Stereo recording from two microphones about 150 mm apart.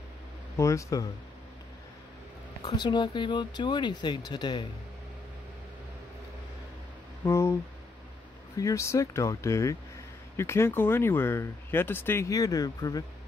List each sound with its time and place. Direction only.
0.6 s speech: 20° left (ahead or behind)
2.6 s speech: 30° left (ahead or behind)
7.2 s speech: 20° left (ahead or behind)
8.5 s speech: 20° left (ahead or behind)